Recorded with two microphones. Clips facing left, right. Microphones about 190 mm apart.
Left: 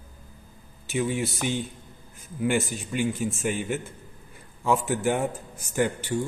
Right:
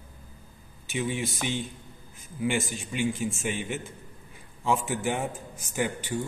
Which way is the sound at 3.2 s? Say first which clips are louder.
Left 2 dB; centre (ahead or behind).